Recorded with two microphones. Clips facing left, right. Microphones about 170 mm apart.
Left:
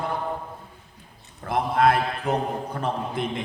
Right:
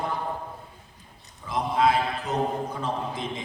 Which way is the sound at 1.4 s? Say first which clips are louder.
Left 3 dB; 60° left (ahead or behind).